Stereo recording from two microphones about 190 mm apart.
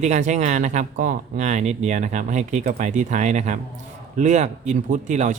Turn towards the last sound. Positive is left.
turn(degrees=-40)  # may be behind; listen again after turning